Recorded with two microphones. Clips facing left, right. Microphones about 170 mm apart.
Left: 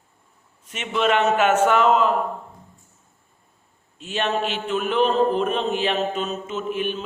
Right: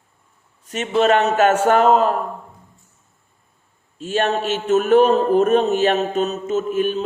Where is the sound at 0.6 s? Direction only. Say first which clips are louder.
Right 5 dB; 40° right (ahead or behind).